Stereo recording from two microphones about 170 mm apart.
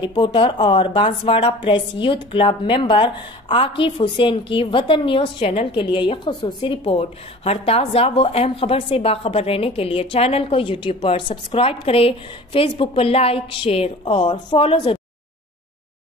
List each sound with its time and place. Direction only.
0.0 s speech: 25° left (ahead or behind)